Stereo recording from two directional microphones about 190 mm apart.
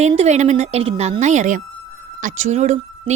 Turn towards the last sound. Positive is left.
turn(degrees=-35)  # may be behind; listen again after turning